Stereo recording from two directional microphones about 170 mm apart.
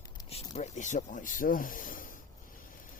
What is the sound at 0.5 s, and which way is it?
Speech, 45° left (ahead or behind).